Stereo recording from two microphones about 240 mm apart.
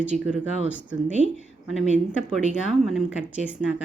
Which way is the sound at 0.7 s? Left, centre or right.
Centre.